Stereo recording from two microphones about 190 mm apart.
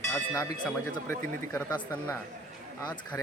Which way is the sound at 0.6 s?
10° left (ahead or behind).